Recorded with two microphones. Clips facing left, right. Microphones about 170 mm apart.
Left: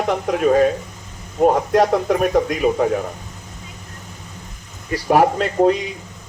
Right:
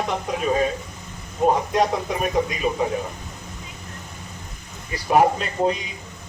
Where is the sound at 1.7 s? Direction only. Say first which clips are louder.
Left 6 dB; 70° left (ahead or behind).